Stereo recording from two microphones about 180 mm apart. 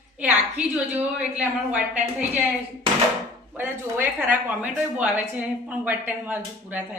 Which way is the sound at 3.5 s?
10° right (ahead or behind).